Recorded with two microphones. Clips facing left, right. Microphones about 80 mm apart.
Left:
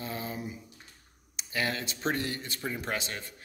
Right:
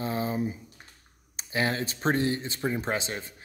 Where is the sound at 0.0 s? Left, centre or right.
Right.